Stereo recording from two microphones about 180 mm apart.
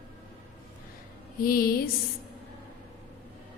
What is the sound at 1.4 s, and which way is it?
Speech, 55° left (ahead or behind).